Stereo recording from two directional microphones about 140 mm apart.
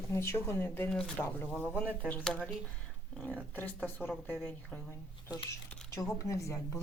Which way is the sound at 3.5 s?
10° left (ahead or behind).